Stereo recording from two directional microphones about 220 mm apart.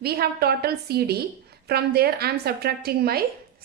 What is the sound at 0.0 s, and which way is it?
A woman's voice, 45° right (ahead or behind).